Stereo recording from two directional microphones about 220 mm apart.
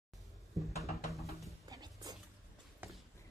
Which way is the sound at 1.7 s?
15° right (ahead or behind).